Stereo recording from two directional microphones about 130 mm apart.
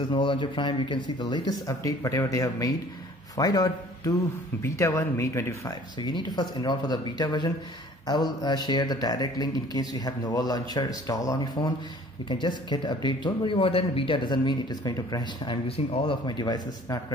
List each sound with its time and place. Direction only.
0.1 s speech: 40° left (ahead or behind); by 5.6 s 20° left (ahead or behind)
6.0 s speech: 35° left (ahead or behind)
15.7 s speech: 45° left (ahead or behind)